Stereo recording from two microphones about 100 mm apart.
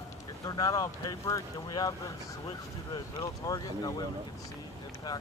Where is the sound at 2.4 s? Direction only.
55° left (ahead or behind).